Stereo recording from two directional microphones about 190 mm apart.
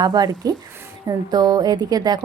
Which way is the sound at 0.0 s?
20° right (ahead or behind).